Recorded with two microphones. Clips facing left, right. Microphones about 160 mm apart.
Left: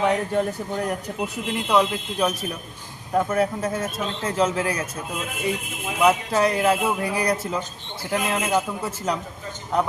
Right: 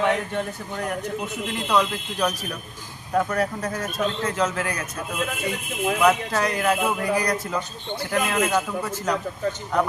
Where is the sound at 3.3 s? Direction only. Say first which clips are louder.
Left 3 dB; 25° left (ahead or behind).